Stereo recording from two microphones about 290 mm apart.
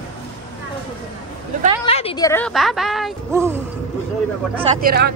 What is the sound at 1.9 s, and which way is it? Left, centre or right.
Speech, centre.